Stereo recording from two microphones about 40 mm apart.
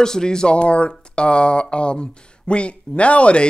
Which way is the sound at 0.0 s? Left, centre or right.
Centre.